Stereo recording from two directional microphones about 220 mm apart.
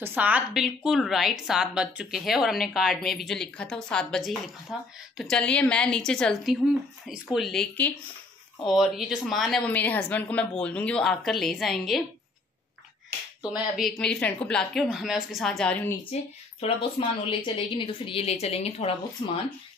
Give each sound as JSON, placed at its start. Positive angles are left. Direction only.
{"t": 0.0, "sound": "a woman's voice", "side_deg": -5}
{"t": 13.4, "sound": "a woman's voice", "side_deg": 0}
{"t": 16.0, "sound": "a woman's voice", "side_deg": 25}